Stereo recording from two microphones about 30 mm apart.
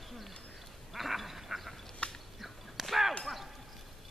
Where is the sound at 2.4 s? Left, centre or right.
Centre.